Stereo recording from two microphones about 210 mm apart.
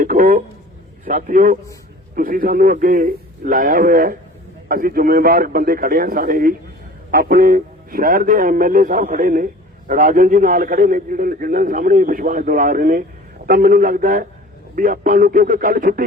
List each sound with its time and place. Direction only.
0.0 s a man's voice: 40° right (ahead or behind)